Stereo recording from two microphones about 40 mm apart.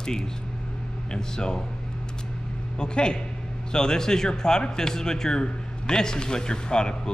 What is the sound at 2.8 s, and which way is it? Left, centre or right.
Speech, left.